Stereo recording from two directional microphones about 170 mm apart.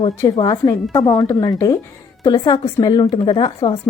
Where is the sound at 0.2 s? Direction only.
20° left (ahead or behind).